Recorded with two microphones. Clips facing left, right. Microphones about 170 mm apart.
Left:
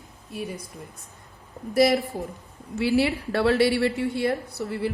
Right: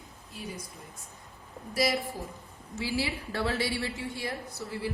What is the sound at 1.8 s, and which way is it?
A woman's voice, 60° left (ahead or behind).